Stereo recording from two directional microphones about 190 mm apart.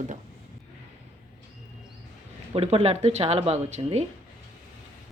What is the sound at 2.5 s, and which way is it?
Speech, 30° right (ahead or behind).